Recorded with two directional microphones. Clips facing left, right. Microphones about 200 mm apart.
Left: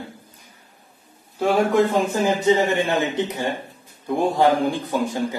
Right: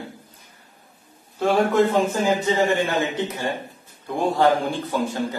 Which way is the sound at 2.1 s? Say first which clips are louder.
Left 3 dB; 20° left (ahead or behind).